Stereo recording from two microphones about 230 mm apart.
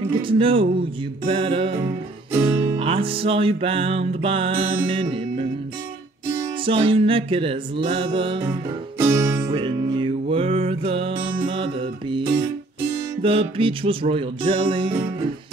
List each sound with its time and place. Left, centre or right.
0.1 s music: right
2.8 s music: right
6.6 s music: right